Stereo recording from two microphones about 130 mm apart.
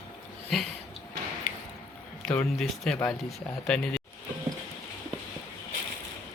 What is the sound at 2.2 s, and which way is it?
Speech, 5° left (ahead or behind).